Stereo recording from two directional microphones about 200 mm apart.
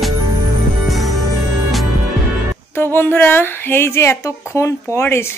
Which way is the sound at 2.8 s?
10° left (ahead or behind).